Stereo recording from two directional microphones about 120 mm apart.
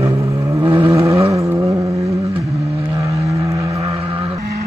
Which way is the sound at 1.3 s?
25° right (ahead or behind).